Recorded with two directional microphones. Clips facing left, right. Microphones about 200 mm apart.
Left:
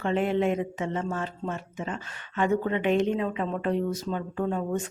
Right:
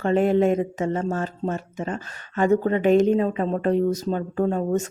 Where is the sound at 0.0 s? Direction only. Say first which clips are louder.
Right 6 dB; 40° right (ahead or behind).